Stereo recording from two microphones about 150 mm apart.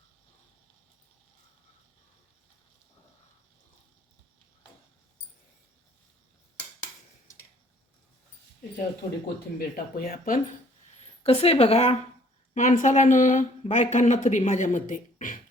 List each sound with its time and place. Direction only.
9.6 s speech: 90° left; by 10.4 s 70° left (ahead or behind)
10.9 s a woman's voice: 45° left (ahead or behind)
12.5 s speech: 60° left (ahead or behind)